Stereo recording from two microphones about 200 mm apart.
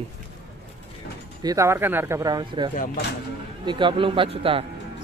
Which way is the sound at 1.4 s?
15° right (ahead or behind).